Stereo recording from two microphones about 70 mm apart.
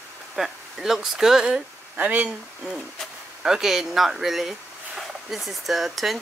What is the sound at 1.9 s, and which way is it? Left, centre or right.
Speech, right.